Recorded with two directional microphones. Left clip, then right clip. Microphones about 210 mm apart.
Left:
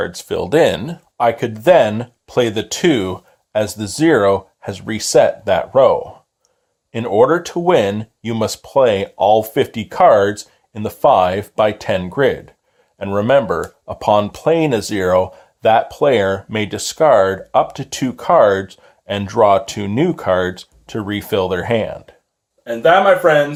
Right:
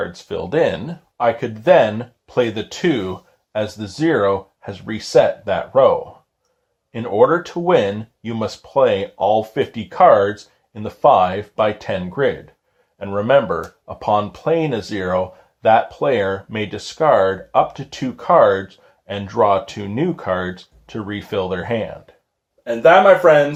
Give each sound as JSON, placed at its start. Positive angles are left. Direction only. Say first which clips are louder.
{"t": 0.0, "sound": "speech", "louder": "left 4 dB", "side_deg": 45}
{"t": 22.6, "sound": "speech", "louder": "right 1 dB", "side_deg": 10}